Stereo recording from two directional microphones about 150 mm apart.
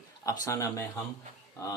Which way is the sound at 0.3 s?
20° left (ahead or behind).